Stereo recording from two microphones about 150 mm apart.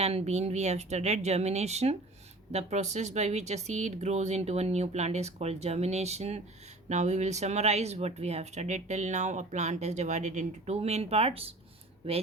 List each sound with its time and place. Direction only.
0.0 s speech: 45° right (ahead or behind)